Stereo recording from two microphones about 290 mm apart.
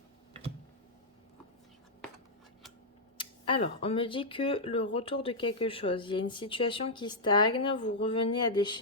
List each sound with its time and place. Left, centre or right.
3.2 s speech: centre